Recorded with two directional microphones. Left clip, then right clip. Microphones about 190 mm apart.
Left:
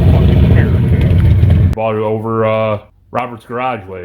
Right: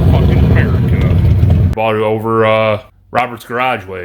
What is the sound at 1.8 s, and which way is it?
Speech, 15° right (ahead or behind).